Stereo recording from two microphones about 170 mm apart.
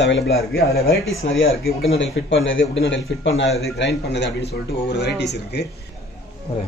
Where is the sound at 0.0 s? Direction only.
90° left.